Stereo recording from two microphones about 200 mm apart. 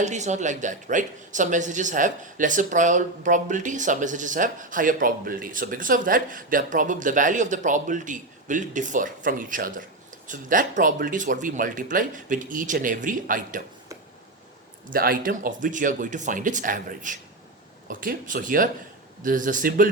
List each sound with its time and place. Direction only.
0.0 s speech: 35° right (ahead or behind)
14.8 s speech: 45° right (ahead or behind)